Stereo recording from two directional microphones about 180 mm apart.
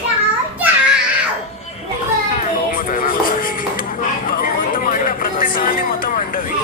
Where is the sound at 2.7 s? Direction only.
50° left (ahead or behind).